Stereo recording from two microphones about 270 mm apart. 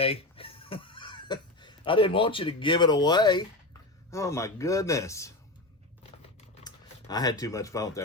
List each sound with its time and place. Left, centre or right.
0.0 s speech: left
6.7 s speech: centre